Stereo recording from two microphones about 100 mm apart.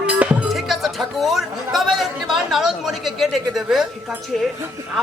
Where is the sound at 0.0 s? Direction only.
10° right (ahead or behind).